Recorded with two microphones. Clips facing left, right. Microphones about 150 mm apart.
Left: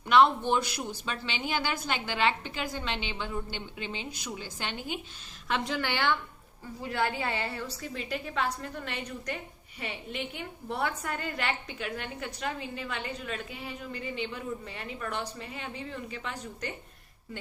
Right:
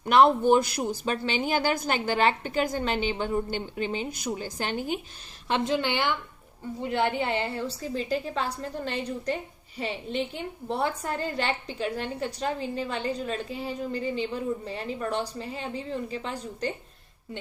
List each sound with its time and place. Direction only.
0.0 s a woman's voice: 45° right (ahead or behind)
5.5 s a woman's voice: 25° right (ahead or behind)